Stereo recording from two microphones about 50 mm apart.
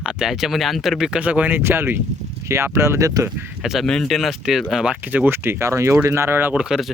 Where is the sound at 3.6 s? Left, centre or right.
Centre.